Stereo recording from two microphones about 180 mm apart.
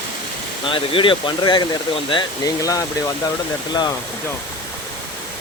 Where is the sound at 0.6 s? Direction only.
30° left (ahead or behind).